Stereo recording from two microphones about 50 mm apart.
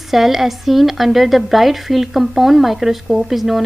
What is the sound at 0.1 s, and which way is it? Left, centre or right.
Speech, centre.